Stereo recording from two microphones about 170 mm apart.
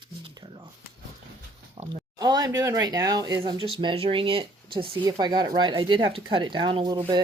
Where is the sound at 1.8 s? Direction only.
35° right (ahead or behind).